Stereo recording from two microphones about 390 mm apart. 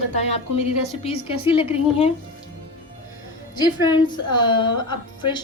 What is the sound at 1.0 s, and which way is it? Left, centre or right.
A woman's voice, centre.